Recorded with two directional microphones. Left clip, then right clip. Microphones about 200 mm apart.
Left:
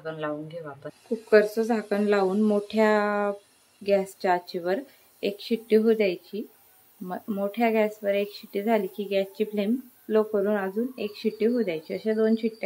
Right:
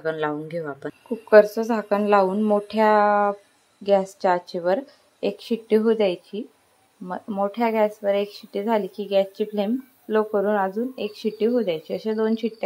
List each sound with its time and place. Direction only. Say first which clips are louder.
0.0 s speech: right 6 dB; 30° right (ahead or behind)
1.3 s speech: right 5 dB; 5° right (ahead or behind)